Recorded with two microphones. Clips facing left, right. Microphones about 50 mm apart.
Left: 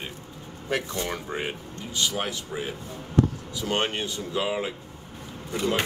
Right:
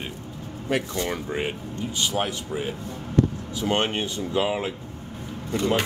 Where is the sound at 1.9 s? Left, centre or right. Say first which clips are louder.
Right 1 dB; right.